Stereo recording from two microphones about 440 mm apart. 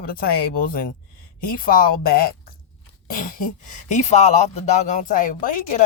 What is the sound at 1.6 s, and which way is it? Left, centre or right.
Speech, centre.